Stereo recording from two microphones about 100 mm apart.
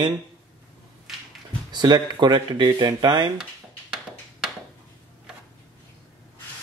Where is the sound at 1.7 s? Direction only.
45° right (ahead or behind).